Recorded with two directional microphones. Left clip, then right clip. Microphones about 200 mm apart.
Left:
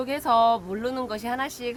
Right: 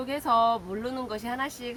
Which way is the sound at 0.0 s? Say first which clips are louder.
Left 3 dB; 55° left (ahead or behind).